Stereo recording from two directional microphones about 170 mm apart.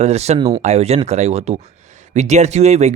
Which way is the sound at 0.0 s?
40° right (ahead or behind).